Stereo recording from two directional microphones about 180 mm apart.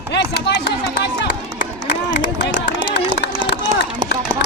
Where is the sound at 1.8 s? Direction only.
75° left (ahead or behind).